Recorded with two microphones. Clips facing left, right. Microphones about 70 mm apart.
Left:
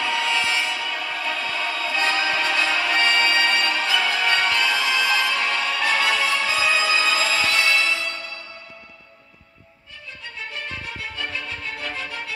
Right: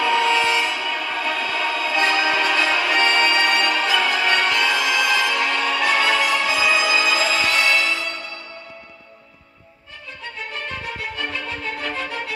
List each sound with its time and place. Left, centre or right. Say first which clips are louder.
0.0 s train: right 5 dB; right
7.5 s music: right 2 dB; right
10.5 s music: right 4 dB; right